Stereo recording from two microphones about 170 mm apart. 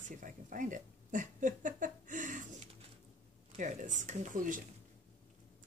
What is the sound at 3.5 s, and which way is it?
Speech, 45° right (ahead or behind).